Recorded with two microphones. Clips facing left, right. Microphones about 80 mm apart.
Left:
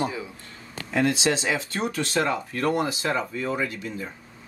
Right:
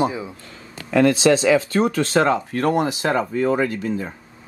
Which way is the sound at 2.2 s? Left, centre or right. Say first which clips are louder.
Right 7 dB; right.